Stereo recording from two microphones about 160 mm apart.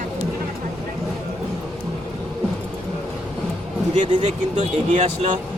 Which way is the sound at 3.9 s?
45° right (ahead or behind).